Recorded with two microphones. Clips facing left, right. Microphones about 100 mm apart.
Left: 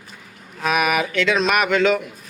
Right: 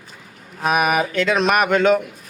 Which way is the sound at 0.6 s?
40° right (ahead or behind).